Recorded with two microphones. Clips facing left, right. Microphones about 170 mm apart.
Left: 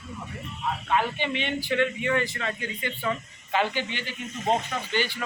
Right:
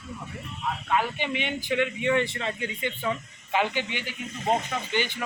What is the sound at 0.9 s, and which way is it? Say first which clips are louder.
Speech: left 1 dB; 15° right (ahead or behind).